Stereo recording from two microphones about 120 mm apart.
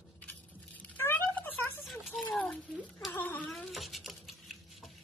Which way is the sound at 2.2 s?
10° left (ahead or behind).